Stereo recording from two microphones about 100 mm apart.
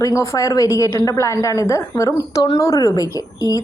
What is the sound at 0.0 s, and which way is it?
A woman's voice, 30° left (ahead or behind).